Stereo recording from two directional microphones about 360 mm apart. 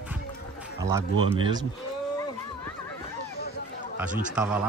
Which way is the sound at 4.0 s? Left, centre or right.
Centre.